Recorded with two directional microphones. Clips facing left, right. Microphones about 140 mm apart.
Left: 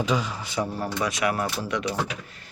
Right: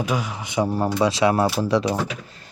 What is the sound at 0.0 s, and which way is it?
Speech, 10° right (ahead or behind).